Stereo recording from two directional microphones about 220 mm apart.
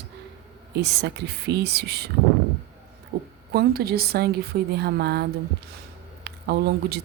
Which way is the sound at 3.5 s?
45° right (ahead or behind).